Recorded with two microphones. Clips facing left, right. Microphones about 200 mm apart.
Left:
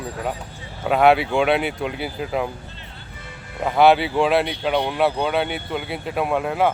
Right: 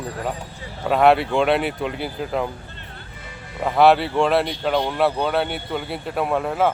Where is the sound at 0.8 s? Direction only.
Centre (ahead or behind).